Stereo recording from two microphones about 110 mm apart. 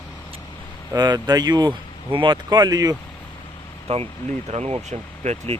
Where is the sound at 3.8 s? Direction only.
65° right (ahead or behind); by 5.5 s 90° right.